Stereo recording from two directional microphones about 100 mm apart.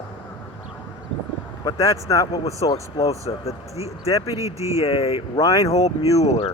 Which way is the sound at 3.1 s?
90° left.